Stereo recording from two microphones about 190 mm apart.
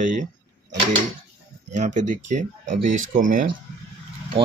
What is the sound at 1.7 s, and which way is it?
Speech, 40° right (ahead or behind).